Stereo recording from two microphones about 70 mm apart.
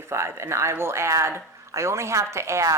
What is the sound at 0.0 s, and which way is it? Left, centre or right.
Speech, right.